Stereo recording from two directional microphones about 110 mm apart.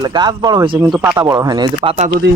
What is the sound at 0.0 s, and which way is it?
Speech, 40° right (ahead or behind).